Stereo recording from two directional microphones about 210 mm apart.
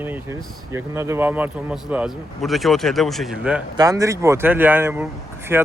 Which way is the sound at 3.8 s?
15° right (ahead or behind).